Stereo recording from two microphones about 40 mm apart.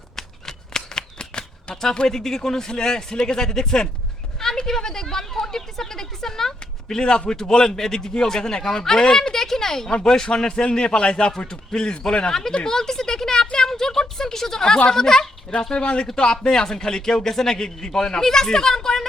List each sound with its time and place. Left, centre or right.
0.2 s shuffling cards: centre
1.8 s a woman's voice: centre
9.9 s speech: left
12.6 s a sound: centre
13.7 s a woman's voice: centre
15.7 s a woman's voice: left